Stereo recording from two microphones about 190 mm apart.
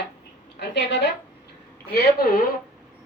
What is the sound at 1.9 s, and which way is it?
Speech, 55° left (ahead or behind).